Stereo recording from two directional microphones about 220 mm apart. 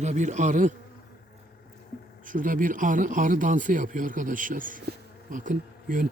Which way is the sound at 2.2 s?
35° right (ahead or behind).